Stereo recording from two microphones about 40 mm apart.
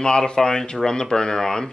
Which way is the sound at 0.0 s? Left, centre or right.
Centre.